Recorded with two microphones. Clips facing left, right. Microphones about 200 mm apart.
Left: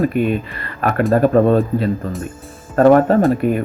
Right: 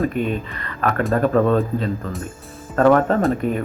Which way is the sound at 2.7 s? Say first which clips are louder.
Left 4 dB; 30° left (ahead or behind).